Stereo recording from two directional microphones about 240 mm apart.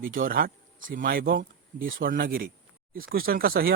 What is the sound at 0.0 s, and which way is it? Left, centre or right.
Speech, right.